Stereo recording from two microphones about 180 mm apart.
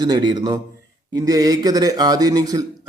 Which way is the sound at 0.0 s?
25° right (ahead or behind).